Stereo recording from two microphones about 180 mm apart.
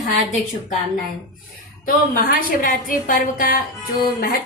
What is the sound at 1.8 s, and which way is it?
A woman's voice, 50° left (ahead or behind).